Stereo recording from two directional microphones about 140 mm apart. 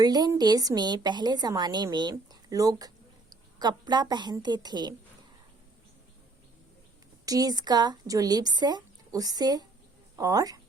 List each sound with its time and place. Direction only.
0.0 s a woman's voice: 30° right (ahead or behind)
7.3 s a woman's voice: 25° right (ahead or behind)